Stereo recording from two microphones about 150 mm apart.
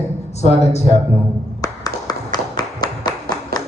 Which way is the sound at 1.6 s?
25° left (ahead or behind).